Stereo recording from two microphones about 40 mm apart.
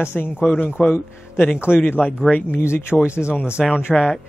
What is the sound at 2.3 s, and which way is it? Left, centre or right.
Speech, left.